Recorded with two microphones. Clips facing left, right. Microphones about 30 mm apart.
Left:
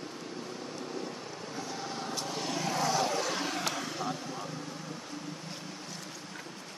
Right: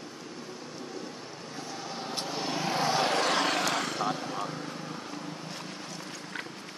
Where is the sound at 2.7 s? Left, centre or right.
Right.